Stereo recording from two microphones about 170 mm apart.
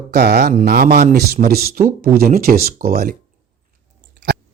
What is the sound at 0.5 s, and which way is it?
A man's voice, 60° right (ahead or behind).